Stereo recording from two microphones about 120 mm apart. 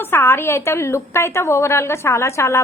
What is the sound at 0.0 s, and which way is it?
A woman's voice, 20° left (ahead or behind).